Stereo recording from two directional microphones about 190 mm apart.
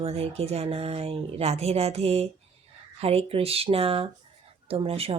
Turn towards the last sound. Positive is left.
turn(degrees=-30)  # may be behind; listen again after turning